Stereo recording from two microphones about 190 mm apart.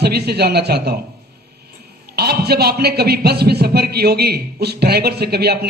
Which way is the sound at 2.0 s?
55° right (ahead or behind).